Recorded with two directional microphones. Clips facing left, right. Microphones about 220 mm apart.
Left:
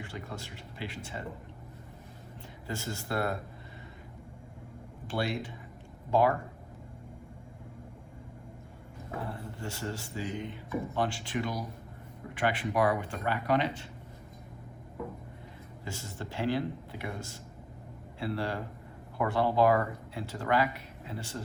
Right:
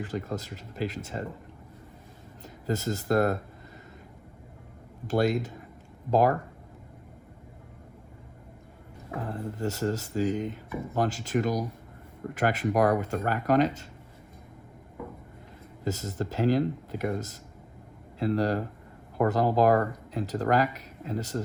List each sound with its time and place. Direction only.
0.0 s speech: 40° right (ahead or behind)
2.6 s speech: 40° right (ahead or behind)
5.0 s speech: 45° right (ahead or behind)
9.3 s speech: 40° right (ahead or behind)
15.8 s speech: 40° right (ahead or behind)